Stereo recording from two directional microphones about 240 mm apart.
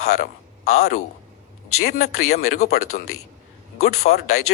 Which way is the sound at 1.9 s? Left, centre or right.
Left.